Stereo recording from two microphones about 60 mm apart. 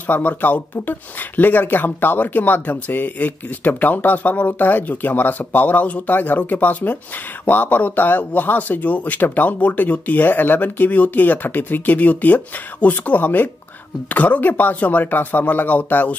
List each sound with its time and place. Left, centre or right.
0.0 s speech: left